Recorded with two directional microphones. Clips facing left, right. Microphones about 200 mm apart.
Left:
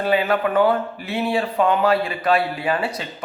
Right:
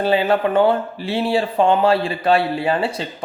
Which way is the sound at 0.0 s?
30° right (ahead or behind).